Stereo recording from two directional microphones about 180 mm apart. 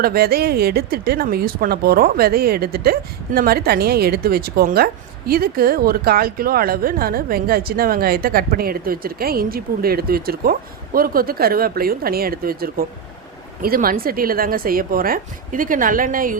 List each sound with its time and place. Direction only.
0.0 s a woman's voice: 60° right (ahead or behind)